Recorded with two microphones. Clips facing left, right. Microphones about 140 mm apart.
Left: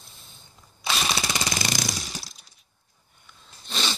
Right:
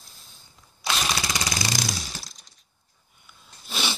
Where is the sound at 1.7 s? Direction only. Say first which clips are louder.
Even; 20° left (ahead or behind).